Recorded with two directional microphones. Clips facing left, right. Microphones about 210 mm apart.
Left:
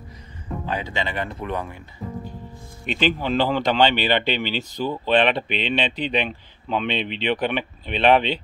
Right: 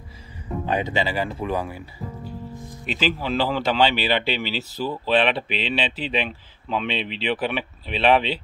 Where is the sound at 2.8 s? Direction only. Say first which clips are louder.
Left 2 dB; 5° right (ahead or behind).